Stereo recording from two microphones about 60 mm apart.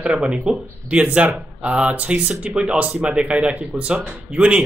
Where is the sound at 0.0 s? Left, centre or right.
Centre.